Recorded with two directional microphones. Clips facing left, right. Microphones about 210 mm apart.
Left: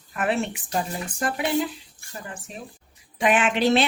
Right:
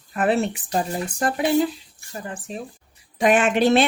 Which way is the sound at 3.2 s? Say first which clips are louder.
Right 3 dB; 45° right (ahead or behind).